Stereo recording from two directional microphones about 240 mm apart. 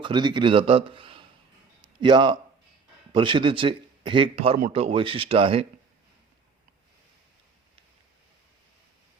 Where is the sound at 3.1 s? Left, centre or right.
Right.